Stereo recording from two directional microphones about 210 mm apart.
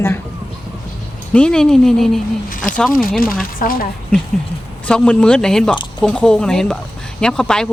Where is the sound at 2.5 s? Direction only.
40° left (ahead or behind).